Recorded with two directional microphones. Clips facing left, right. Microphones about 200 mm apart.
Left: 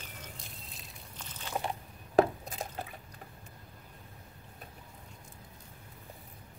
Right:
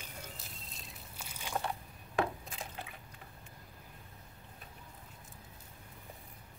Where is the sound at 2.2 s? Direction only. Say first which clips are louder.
Left 8 dB; 40° left (ahead or behind).